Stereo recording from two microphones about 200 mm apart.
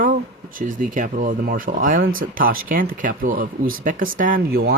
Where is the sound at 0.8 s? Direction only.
40° right (ahead or behind).